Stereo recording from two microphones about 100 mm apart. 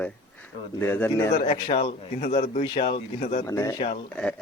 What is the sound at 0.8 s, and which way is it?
Speech, 20° left (ahead or behind).